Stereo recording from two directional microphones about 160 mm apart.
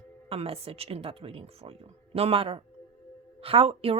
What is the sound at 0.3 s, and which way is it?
Speech, 35° right (ahead or behind).